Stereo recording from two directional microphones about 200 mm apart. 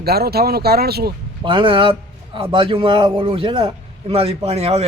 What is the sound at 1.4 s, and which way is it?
A man's voice, 25° right (ahead or behind).